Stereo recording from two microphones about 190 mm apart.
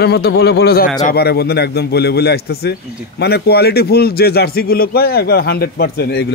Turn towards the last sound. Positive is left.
turn(degrees=55)  # may be behind; listen again after turning